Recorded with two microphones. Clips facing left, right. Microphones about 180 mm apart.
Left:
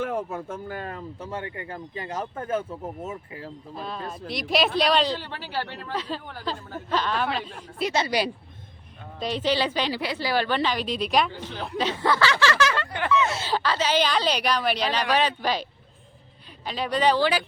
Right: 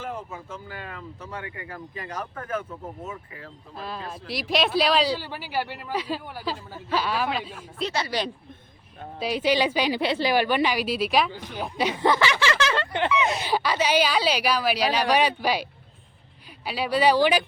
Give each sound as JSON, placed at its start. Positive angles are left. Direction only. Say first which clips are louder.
{"t": 0.0, "sound": "speech", "louder": "left 6 dB", "side_deg": 65}
{"t": 3.8, "sound": "speech", "louder": "even", "side_deg": 0}
{"t": 7.8, "sound": "speech", "louder": "left 3 dB", "side_deg": 15}
{"t": 9.1, "sound": "speech", "louder": "right 2 dB", "side_deg": -10}
{"t": 10.0, "sound": "a woman's voice", "louder": "right 5 dB", "side_deg": -25}
{"t": 10.3, "sound": "speech", "louder": "left 1 dB", "side_deg": -15}
{"t": 16.6, "sound": "speech", "louder": "right 1 dB", "side_deg": -5}